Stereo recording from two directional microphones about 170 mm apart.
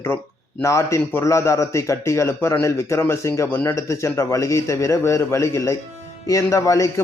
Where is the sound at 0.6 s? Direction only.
15° left (ahead or behind).